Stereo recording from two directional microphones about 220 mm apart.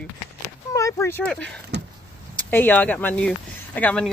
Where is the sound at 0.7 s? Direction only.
15° left (ahead or behind).